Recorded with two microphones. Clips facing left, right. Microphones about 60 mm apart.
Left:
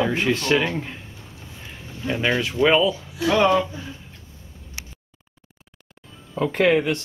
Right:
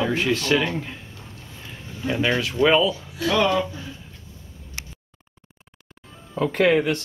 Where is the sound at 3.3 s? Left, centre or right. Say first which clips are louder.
Left 3 dB; left.